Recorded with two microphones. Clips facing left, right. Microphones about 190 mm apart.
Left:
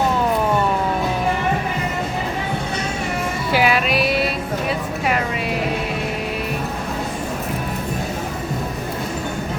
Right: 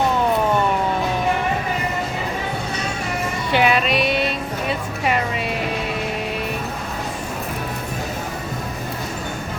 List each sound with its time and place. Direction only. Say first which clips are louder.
3.5 s music: even; 5° left (ahead or behind)